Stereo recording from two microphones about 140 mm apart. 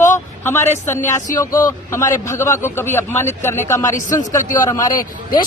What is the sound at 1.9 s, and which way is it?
A man's voice, 20° left (ahead or behind).